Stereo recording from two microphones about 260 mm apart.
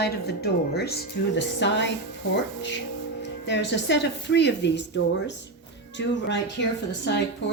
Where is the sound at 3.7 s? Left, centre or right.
Left.